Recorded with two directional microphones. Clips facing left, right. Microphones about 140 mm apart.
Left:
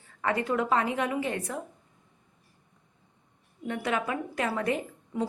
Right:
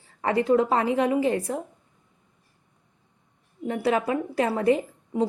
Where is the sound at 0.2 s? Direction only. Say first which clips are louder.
Right 7 dB; 30° right (ahead or behind).